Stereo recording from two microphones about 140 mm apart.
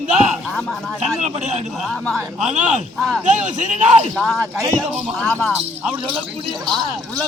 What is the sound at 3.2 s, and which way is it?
Speech, 60° right (ahead or behind).